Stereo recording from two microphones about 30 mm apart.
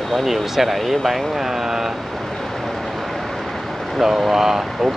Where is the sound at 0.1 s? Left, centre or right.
Centre.